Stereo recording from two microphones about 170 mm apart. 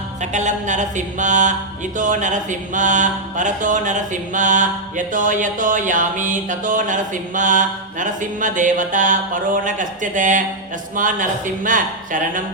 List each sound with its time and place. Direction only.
0.2 s mantra: 45° right (ahead or behind)